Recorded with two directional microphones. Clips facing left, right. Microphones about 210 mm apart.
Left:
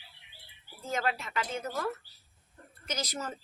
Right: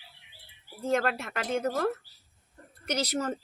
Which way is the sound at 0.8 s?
60° right (ahead or behind).